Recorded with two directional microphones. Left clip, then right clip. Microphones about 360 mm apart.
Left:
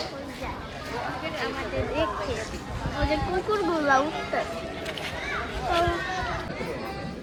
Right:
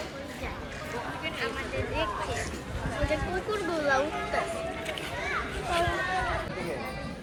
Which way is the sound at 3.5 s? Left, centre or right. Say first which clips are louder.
Left 5 dB; centre.